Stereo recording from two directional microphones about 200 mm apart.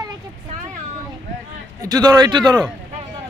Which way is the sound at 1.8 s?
20° right (ahead or behind).